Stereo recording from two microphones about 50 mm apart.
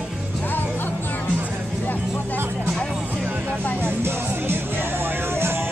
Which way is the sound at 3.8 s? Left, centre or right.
Right.